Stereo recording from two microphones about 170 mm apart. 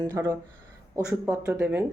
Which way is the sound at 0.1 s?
15° right (ahead or behind).